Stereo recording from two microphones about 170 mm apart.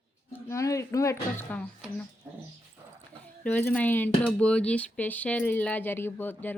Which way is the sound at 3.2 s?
5° left (ahead or behind).